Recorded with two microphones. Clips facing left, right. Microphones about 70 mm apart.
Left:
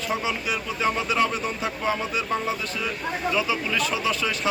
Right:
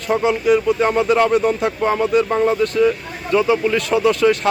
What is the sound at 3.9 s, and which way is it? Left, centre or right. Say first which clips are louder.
Speech: right 11 dB; right.